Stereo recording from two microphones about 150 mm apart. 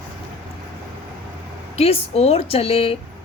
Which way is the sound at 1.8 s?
45° left (ahead or behind).